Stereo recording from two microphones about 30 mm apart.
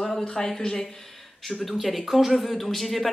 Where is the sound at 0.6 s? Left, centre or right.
Left.